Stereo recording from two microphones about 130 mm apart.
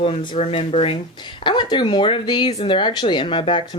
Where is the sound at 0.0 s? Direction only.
40° left (ahead or behind).